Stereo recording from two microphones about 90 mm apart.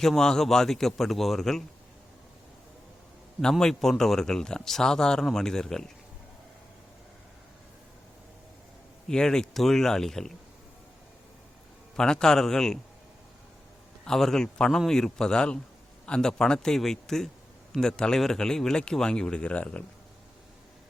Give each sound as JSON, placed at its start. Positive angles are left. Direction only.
{"t": 0.0, "sound": "speech", "side_deg": 5}
{"t": 3.6, "sound": "speech", "side_deg": 5}
{"t": 9.0, "sound": "speech", "side_deg": 5}
{"t": 11.9, "sound": "speech", "side_deg": 10}
{"t": 14.0, "sound": "speech", "side_deg": 5}